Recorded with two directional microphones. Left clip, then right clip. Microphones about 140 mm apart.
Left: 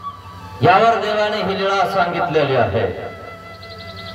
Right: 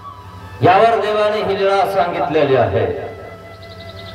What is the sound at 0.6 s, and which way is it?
A man's voice, 25° left (ahead or behind).